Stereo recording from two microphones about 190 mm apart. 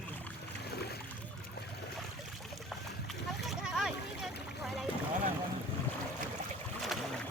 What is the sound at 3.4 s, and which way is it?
Boat, centre (ahead or behind).